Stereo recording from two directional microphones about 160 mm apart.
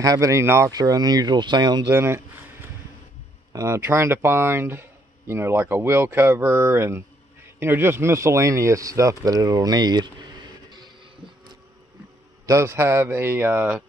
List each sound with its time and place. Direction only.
0.0 s speech: 20° right (ahead or behind)
1.9 s speech: 15° right (ahead or behind)
3.5 s speech: 15° right (ahead or behind)
12.4 s speech: 15° right (ahead or behind)